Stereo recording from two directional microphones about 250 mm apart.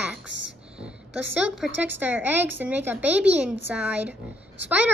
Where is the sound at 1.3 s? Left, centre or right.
Centre.